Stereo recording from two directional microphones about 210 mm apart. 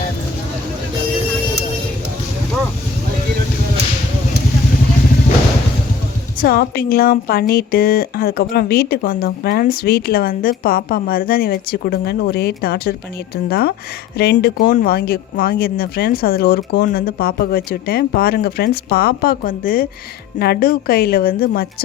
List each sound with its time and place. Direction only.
6.4 s speech: 45° left (ahead or behind)